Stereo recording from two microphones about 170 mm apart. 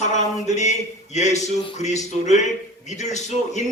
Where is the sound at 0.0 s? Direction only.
45° left (ahead or behind).